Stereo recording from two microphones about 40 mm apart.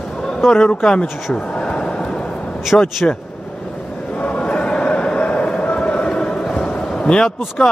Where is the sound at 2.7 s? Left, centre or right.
Left.